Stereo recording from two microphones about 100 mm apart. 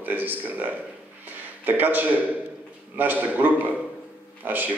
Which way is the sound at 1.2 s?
20° right (ahead or behind).